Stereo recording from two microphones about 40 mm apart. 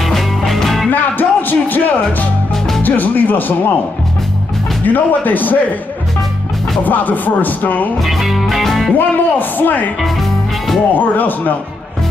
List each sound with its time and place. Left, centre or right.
0.0 s music: centre
1.1 s music: left
2.5 s music: centre
2.8 s speech: left
4.8 s speech: left
6.8 s speech: left
8.0 s music: centre
8.9 s speech: left
11.0 s speech: left